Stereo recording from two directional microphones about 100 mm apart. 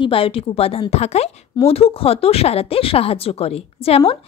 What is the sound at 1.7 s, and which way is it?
A woman's voice, 75° left (ahead or behind).